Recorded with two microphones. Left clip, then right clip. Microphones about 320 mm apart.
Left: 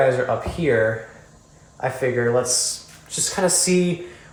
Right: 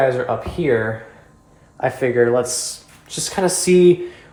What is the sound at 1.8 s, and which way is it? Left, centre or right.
Speech, right.